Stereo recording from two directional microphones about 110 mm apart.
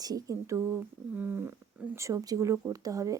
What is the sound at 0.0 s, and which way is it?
Speech, 35° right (ahead or behind).